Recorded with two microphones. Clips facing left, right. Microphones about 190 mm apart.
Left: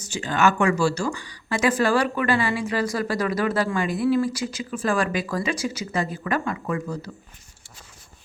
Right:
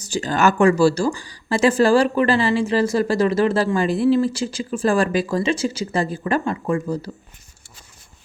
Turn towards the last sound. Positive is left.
turn(degrees=-30)  # may be behind; listen again after turning